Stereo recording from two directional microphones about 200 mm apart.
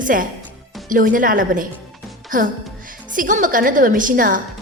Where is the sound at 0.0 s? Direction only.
45° right (ahead or behind).